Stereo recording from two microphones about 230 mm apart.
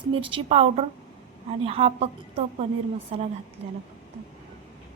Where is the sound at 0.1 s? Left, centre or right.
Right.